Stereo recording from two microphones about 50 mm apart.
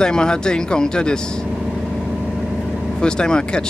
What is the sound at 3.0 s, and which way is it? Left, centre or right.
Speech, centre.